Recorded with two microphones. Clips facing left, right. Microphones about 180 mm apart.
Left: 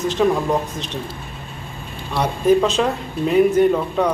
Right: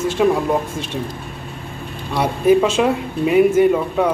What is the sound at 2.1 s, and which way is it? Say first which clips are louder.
Speech: right 2 dB; 10° right (ahead or behind).